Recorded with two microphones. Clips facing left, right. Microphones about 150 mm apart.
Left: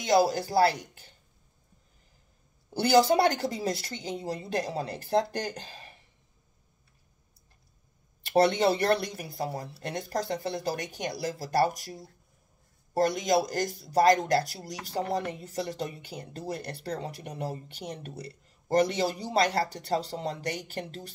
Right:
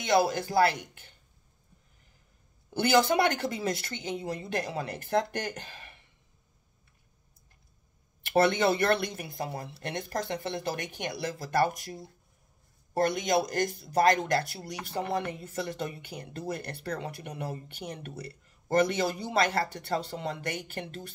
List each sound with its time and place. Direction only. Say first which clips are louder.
0.0 s speech: left 2 dB; 35° left (ahead or behind)
2.7 s speech: left 2 dB; 35° left (ahead or behind)
8.3 s speech: left 1 dB; 35° left (ahead or behind)
14.0 s speech: left 3 dB; 40° left (ahead or behind)